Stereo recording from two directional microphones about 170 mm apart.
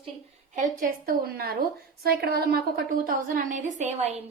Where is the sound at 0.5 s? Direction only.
55° right (ahead or behind).